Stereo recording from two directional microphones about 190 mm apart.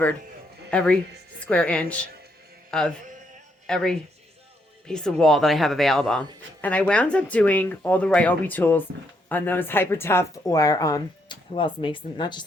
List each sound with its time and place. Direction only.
0.7 s speech: 5° left (ahead or behind); by 12.4 s 25° left (ahead or behind)